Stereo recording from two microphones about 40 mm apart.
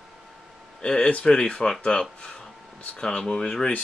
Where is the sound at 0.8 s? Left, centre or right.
Left.